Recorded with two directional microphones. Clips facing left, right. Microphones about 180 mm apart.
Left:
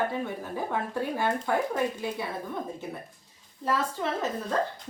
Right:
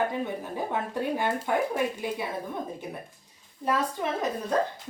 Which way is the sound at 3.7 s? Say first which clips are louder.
Right 1 dB; 15° right (ahead or behind).